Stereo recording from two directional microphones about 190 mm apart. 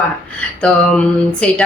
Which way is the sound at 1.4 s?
5° left (ahead or behind).